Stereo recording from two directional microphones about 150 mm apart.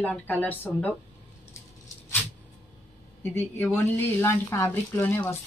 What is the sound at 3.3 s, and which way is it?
A woman's voice, 15° left (ahead or behind).